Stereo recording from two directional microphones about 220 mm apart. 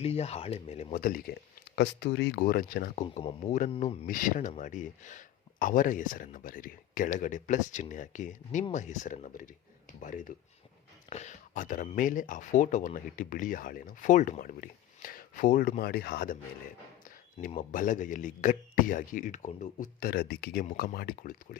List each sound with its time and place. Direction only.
0.0 s speech: 30° left (ahead or behind)
4.0 s speech: 40° left (ahead or behind)
17.5 s speech: 35° left (ahead or behind)